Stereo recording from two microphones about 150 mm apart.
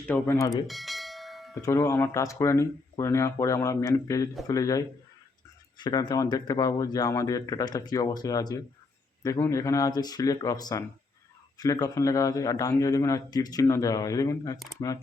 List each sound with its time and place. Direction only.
0.1 s a man's voice: 20° left (ahead or behind)
0.7 s bell: centre (ahead or behind)
1.6 s a man's voice: 20° left (ahead or behind)